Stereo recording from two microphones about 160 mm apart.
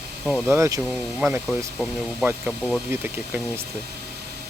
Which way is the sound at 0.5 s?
15° right (ahead or behind).